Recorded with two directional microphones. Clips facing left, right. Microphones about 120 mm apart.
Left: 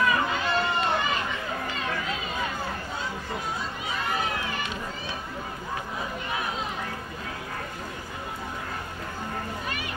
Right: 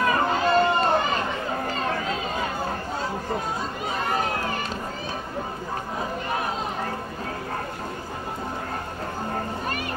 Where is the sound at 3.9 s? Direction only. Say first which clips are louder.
Right 3 dB; 45° right (ahead or behind).